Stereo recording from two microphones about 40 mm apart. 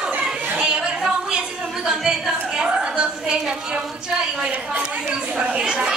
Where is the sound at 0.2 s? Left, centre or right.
Centre.